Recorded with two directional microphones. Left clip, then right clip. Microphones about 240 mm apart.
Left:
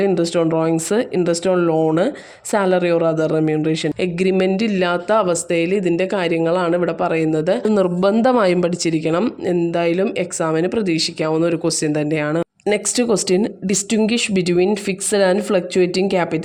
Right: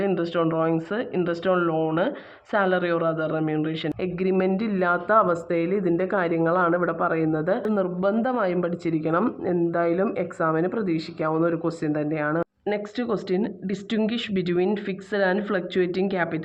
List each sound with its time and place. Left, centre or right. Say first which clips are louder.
0.0 s speech: left 7 dB; left
6.4 s speech: left 3 dB; left
9.5 s speech: left 5 dB; left
11.9 s speech: left 3 dB; left